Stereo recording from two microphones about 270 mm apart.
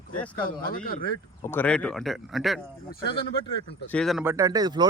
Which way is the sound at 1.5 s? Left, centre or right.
Centre.